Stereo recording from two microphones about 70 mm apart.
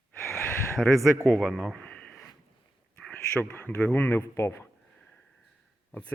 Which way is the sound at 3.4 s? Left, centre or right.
Left.